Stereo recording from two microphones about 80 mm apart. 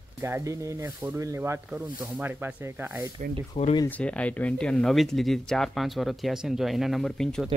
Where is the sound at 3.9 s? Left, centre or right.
Centre.